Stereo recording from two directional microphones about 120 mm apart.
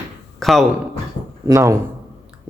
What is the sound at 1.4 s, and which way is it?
Speech, 25° right (ahead or behind).